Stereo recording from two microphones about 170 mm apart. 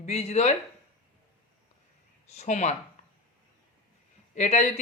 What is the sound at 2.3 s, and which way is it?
Speech, 40° left (ahead or behind).